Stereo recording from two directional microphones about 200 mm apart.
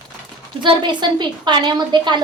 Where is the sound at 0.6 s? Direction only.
20° right (ahead or behind).